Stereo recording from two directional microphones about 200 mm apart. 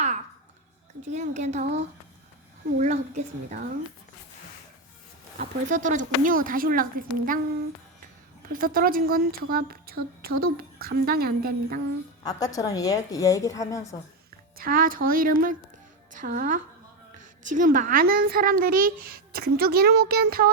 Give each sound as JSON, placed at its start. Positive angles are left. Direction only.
{"t": 1.0, "sound": "a woman's voice", "side_deg": -35}
{"t": 5.4, "sound": "a child's voice", "side_deg": -40}
{"t": 8.5, "sound": "a child's voice", "side_deg": -45}
{"t": 12.2, "sound": "a woman's voice", "side_deg": 20}
{"t": 14.6, "sound": "a child's voice", "side_deg": -45}